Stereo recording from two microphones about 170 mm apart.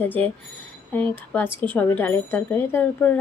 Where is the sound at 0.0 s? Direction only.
10° left (ahead or behind).